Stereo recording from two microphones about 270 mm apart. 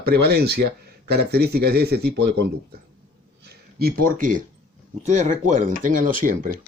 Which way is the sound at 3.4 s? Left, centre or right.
Right.